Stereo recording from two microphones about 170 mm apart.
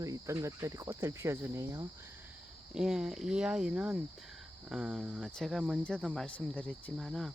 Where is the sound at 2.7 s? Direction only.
5° right (ahead or behind).